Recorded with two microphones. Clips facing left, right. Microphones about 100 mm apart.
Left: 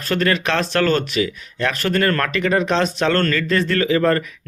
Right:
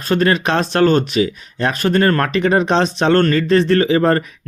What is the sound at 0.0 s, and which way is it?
Speech, 25° right (ahead or behind).